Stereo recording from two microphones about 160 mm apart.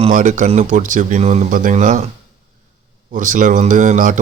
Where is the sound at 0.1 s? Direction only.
55° right (ahead or behind).